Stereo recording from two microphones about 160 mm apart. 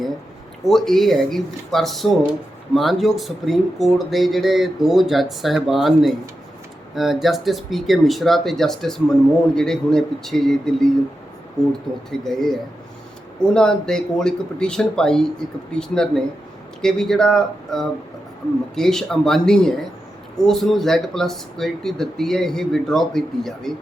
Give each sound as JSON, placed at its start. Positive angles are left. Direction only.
{"t": 0.6, "sound": "speech", "side_deg": 0}
{"t": 11.6, "sound": "speech", "side_deg": 25}
{"t": 12.2, "sound": "speech", "side_deg": 0}